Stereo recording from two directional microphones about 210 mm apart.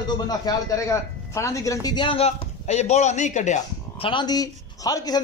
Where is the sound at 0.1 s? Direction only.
20° left (ahead or behind); by 4.1 s 35° left (ahead or behind).